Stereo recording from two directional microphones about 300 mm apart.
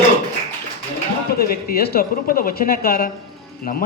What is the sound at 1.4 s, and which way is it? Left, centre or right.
A man's voice, left.